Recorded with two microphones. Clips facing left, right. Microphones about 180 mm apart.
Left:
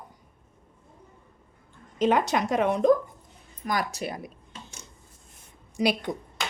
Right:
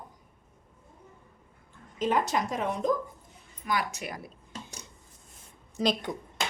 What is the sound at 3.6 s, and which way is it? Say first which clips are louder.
Speech: left 2 dB; 40° left (ahead or behind).